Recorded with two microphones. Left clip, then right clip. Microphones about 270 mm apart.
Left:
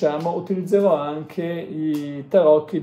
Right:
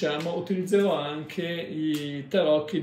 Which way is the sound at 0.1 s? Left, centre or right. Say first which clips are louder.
Left 5 dB; centre.